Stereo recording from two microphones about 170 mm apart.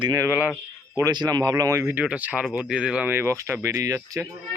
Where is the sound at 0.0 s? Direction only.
20° right (ahead or behind).